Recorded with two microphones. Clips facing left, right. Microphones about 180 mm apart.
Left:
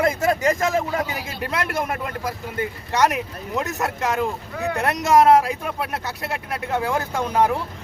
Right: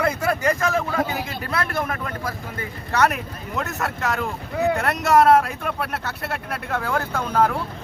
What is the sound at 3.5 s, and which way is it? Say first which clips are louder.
Speech: left 2 dB; 15° left (ahead or behind).